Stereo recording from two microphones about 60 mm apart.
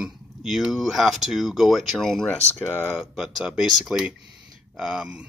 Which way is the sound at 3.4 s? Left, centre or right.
Centre.